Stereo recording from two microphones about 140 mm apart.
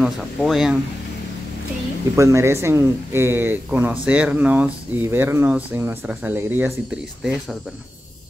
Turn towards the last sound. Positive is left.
turn(degrees=-5)  # may be behind; listen again after turning